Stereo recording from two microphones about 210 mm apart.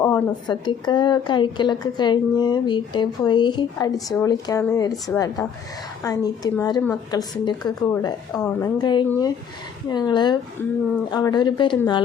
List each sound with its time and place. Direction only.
0.0 s a woman's voice: 20° left (ahead or behind)